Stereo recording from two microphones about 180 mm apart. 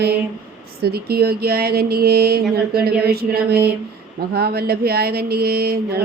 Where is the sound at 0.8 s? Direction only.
60° right (ahead or behind).